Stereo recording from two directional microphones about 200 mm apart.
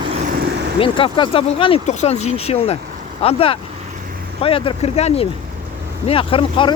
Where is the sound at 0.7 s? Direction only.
25° left (ahead or behind).